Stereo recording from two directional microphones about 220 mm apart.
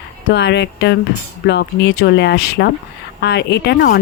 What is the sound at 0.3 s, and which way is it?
Speech, 50° left (ahead or behind).